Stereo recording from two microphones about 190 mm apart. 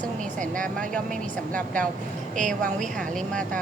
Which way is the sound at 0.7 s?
5° left (ahead or behind).